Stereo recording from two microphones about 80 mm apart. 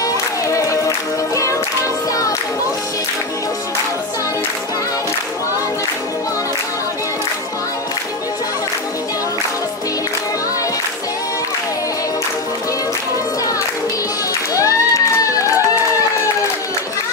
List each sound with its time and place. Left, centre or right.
0.0 s music: left
14.5 s crowd: left